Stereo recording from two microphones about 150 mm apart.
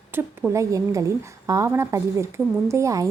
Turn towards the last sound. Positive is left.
turn(degrees=-20)  # may be behind; listen again after turning